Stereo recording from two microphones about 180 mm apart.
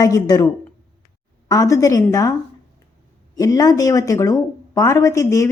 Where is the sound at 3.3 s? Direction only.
20° left (ahead or behind).